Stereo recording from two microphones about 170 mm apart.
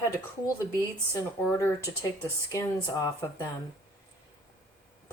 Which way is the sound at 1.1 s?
20° left (ahead or behind).